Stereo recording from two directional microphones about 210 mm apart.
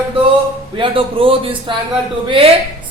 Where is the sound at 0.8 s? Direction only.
25° right (ahead or behind).